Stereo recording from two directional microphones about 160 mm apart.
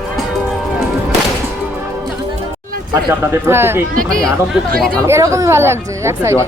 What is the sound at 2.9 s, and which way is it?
Speech, 15° right (ahead or behind).